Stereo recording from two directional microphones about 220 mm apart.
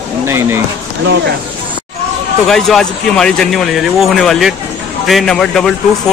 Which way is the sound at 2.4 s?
Centre (ahead or behind).